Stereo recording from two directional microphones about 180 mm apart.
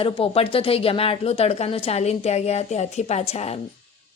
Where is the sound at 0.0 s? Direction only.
30° left (ahead or behind).